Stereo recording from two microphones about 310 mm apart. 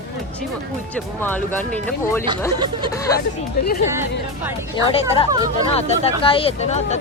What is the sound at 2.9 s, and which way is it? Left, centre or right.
Speech, centre.